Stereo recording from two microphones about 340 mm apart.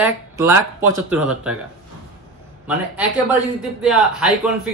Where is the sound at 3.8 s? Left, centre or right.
Centre.